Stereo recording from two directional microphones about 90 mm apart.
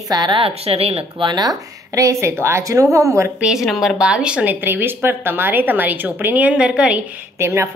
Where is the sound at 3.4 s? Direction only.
5° right (ahead or behind).